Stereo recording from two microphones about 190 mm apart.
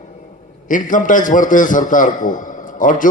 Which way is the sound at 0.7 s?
45° left (ahead or behind).